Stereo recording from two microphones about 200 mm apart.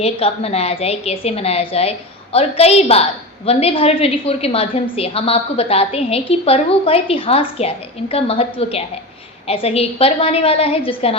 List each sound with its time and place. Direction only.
0.0 s a woman's voice: 30° left (ahead or behind)